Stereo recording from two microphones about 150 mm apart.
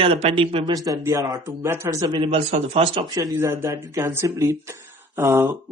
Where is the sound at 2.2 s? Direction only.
45° right (ahead or behind).